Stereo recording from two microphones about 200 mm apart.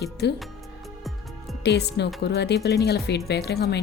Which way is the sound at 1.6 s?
55° left (ahead or behind).